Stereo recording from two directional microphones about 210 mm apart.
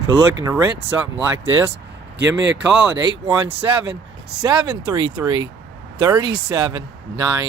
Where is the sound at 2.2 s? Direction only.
60° right (ahead or behind).